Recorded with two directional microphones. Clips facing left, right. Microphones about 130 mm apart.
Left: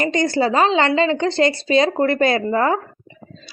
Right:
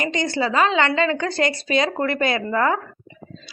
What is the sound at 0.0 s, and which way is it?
A woman's voice, 40° left (ahead or behind).